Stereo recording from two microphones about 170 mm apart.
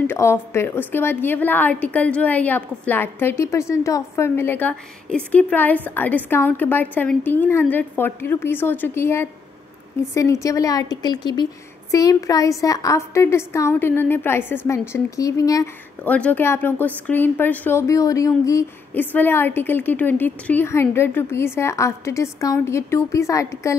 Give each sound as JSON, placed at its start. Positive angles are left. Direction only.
{"t": 0.0, "sound": "a woman's voice", "side_deg": 15}
{"t": 16.0, "sound": "a woman's voice", "side_deg": 10}